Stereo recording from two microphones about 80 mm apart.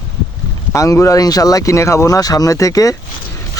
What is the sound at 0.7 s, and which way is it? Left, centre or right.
Speech, left.